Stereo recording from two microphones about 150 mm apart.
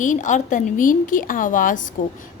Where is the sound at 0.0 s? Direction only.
55° left (ahead or behind).